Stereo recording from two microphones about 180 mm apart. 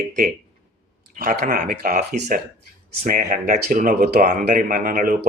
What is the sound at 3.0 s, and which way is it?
Speech, 45° right (ahead or behind).